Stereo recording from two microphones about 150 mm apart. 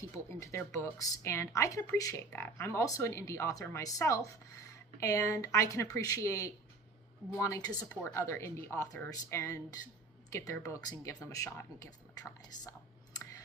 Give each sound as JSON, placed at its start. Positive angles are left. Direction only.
{"t": 0.3, "sound": "speech", "side_deg": 15}